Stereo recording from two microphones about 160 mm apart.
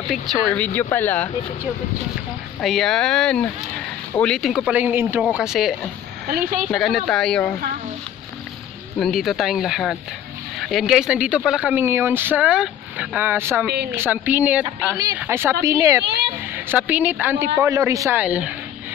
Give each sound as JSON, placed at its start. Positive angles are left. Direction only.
{"t": 0.1, "sound": "speech", "side_deg": 5}
{"t": 2.6, "sound": "speech", "side_deg": 0}
{"t": 6.2, "sound": "speech", "side_deg": -55}
{"t": 6.7, "sound": "speech", "side_deg": 0}
{"t": 9.0, "sound": "a man's voice", "side_deg": 0}
{"t": 18.2, "sound": "speech", "side_deg": -5}